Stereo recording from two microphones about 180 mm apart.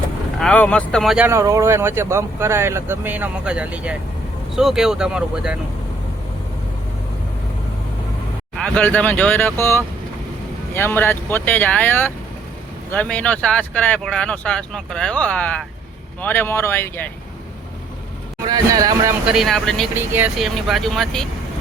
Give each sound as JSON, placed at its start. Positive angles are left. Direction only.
{"t": 0.3, "sound": "speech", "side_deg": 5}
{"t": 1.3, "sound": "speech", "side_deg": -15}
{"t": 8.5, "sound": "speech", "side_deg": 5}
{"t": 18.4, "sound": "speech", "side_deg": -20}
{"t": 19.3, "sound": "speech", "side_deg": 0}